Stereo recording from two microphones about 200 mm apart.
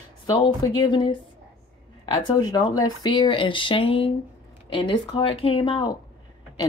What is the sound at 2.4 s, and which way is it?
Speech, 20° left (ahead or behind).